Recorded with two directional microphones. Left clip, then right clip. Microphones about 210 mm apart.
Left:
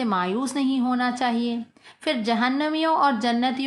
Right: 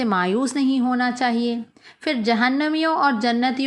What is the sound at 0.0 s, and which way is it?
A woman's voice, 15° right (ahead or behind).